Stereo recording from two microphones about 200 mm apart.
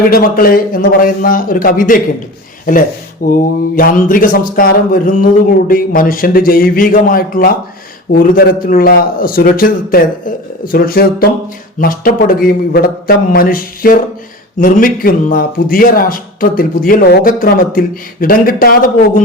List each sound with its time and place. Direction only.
0.1 s speech: 45° left (ahead or behind)